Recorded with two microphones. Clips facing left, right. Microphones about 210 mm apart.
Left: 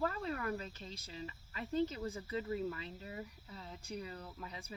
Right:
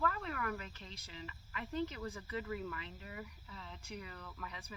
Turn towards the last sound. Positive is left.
turn(degrees=30)  # may be behind; listen again after turning